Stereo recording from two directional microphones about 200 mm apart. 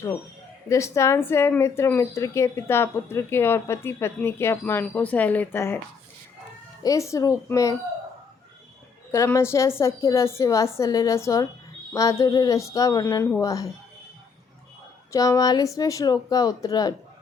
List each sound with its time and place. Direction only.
0.7 s speech: 15° left (ahead or behind)
6.8 s speech: 15° left (ahead or behind)
9.1 s speech: 15° left (ahead or behind)
15.1 s speech: 15° left (ahead or behind)